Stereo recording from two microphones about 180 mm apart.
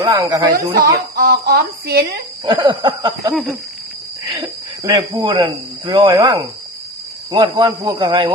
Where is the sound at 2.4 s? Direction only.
20° right (ahead or behind).